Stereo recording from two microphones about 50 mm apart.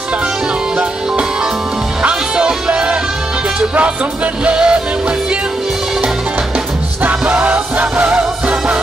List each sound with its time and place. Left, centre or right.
2.0 s music: centre
4.5 s music: centre
7.0 s music: right